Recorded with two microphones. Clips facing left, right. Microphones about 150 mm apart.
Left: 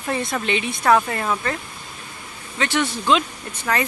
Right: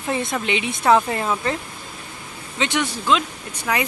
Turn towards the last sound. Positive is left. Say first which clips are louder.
# even
turn(degrees=-10)  # may be behind; listen again after turning